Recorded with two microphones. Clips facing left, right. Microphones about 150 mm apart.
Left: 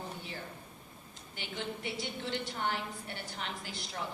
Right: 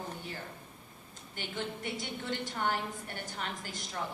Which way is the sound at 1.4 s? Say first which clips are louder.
Right 1 dB; 45° right (ahead or behind).